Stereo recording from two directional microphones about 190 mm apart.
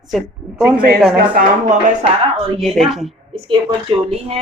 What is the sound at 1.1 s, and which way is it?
Speech, 45° right (ahead or behind).